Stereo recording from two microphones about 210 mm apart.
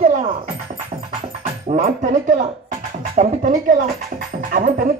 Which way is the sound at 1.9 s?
40° right (ahead or behind).